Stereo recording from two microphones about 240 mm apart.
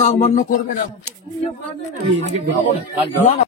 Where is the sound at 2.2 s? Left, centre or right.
Right.